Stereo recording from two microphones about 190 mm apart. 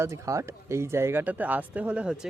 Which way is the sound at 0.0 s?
15° right (ahead or behind).